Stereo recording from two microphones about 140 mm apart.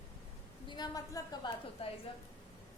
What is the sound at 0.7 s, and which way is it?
Speech, 30° left (ahead or behind).